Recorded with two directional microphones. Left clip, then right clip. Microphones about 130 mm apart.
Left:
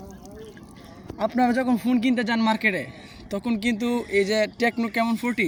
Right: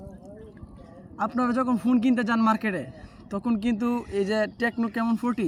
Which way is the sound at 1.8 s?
40° right (ahead or behind).